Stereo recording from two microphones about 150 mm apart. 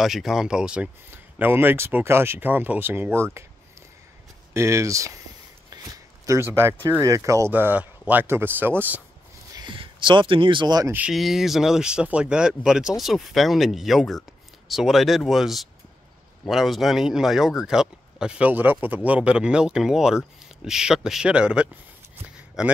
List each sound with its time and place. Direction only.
0.0 s speech: centre (ahead or behind)
4.6 s speech: 20° right (ahead or behind)
6.2 s speech: 20° right (ahead or behind)
9.5 s speech: 30° right (ahead or behind)
10.9 s speech: 5° right (ahead or behind)